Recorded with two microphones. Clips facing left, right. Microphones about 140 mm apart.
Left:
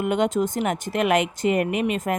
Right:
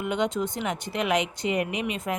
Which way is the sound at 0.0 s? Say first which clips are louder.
Left 5 dB; 50° left (ahead or behind).